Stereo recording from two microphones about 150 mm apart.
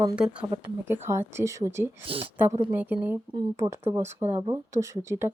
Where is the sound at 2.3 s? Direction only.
15° right (ahead or behind).